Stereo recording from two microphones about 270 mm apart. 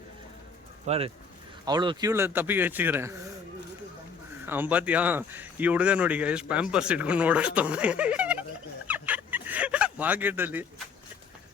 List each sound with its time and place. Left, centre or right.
0.9 s a man's voice: right
4.4 s speech: centre
8.9 s fowl: centre